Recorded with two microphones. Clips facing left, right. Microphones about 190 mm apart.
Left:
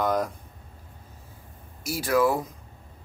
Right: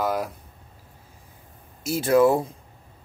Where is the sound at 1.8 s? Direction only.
25° right (ahead or behind).